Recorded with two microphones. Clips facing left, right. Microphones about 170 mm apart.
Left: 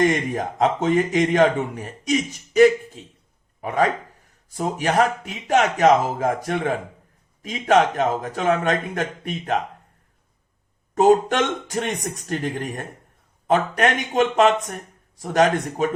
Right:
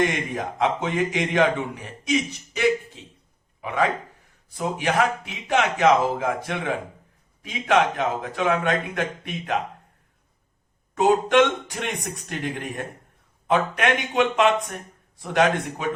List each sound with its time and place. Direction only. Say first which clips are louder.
0.0 s a man's voice: left 4 dB; 40° left (ahead or behind)
10.9 s a man's voice: left 2 dB; 45° left (ahead or behind)